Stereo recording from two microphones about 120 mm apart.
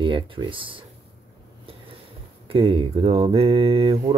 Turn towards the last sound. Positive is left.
turn(degrees=-55)  # may be behind; listen again after turning